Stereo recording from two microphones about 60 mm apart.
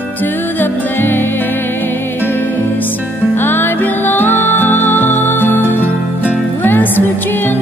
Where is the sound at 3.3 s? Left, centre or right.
Left.